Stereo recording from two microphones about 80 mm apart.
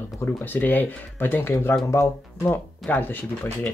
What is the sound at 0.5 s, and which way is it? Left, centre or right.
Speech, left.